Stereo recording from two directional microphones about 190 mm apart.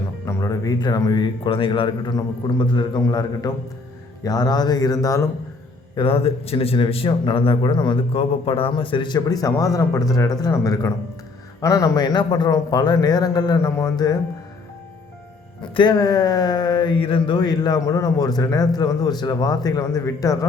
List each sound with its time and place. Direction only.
0.3 s a man's voice: 15° left (ahead or behind)
6.0 s a man's voice: 30° left (ahead or behind)
15.6 s a man's voice: 25° left (ahead or behind)